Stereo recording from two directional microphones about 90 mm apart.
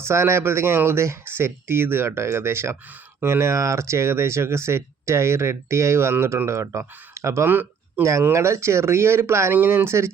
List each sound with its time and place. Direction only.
0.1 s speech: 30° right (ahead or behind)
8.2 s speech: 30° right (ahead or behind)